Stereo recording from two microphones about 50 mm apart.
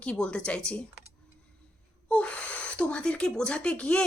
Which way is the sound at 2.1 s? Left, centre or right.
Left.